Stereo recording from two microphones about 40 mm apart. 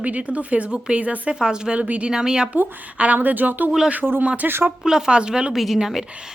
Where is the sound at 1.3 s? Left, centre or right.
Right.